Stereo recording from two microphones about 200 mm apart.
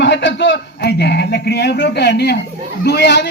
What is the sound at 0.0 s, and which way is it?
A man's voice, 65° left (ahead or behind).